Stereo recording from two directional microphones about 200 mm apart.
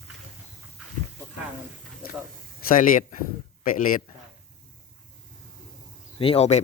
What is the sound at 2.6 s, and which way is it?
Speech, 45° left (ahead or behind).